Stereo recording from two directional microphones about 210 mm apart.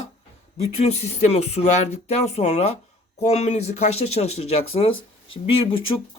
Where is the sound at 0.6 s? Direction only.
30° left (ahead or behind).